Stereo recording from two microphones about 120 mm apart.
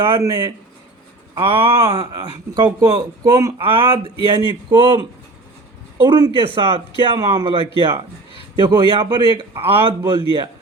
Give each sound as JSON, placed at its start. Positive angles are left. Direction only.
{"t": 0.2, "sound": "speech", "side_deg": -30}
{"t": 1.4, "sound": "speech", "side_deg": -45}
{"t": 1.9, "sound": "speech", "side_deg": -35}
{"t": 3.7, "sound": "speech", "side_deg": -45}